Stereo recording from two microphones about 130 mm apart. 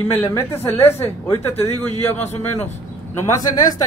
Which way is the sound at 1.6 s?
55° left (ahead or behind).